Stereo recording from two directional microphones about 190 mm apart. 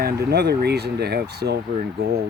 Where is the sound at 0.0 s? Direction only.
55° right (ahead or behind).